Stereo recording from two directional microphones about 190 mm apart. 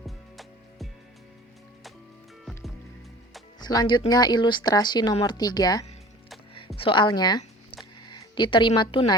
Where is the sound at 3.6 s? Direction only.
20° left (ahead or behind).